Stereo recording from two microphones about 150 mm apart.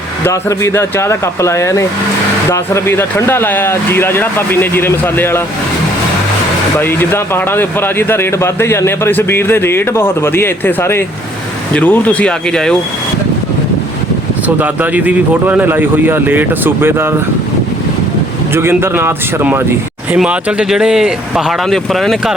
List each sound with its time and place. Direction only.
0.3 s speech: 20° left (ahead or behind)
6.7 s speech: 15° left (ahead or behind)
14.4 s speech: 10° right (ahead or behind)
18.5 s speech: 15° right (ahead or behind); by 22.4 s centre (ahead or behind)